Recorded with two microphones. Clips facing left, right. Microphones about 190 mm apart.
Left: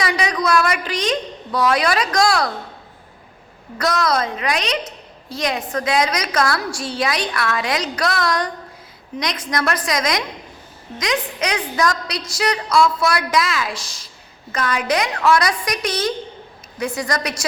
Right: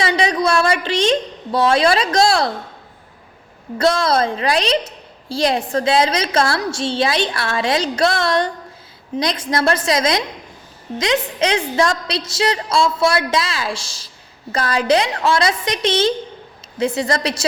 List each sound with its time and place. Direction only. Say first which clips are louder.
0.0 s a woman's voice: right 3 dB; 25° right (ahead or behind)
3.8 s a woman's voice: right 4 dB; 30° right (ahead or behind)